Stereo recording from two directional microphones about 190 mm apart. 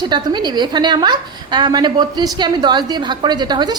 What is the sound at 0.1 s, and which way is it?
A woman's voice, 25° right (ahead or behind).